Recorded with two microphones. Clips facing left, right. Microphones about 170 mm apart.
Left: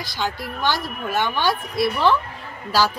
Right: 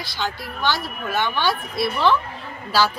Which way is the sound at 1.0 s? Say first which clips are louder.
Left 1 dB; 10° left (ahead or behind).